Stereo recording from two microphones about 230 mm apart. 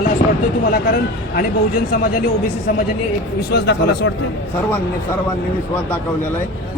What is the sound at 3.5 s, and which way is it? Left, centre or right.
Speech, left.